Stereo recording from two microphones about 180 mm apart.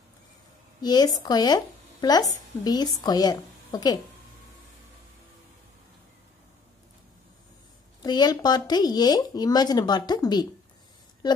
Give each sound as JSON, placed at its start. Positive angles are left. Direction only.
{"t": 0.7, "sound": "speech", "side_deg": 20}
{"t": 8.0, "sound": "speech", "side_deg": 20}